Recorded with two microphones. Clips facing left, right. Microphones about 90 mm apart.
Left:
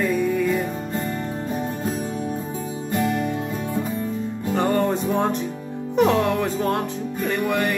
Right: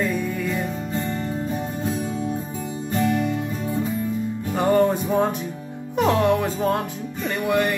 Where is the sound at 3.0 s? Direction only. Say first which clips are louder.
Right 1 dB; 45° left (ahead or behind).